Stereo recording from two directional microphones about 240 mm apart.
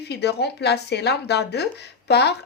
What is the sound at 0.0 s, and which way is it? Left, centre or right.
Speech, left.